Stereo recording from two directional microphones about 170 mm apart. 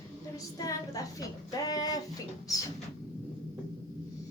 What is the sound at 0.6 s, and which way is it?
A woman's voice, 20° left (ahead or behind).